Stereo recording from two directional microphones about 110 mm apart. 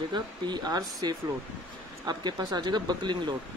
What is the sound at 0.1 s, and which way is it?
Speech, 40° right (ahead or behind).